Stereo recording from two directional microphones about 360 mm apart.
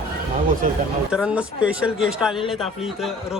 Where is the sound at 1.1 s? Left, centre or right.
Centre.